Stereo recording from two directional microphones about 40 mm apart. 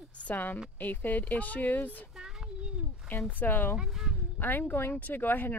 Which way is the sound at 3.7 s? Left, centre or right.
Centre.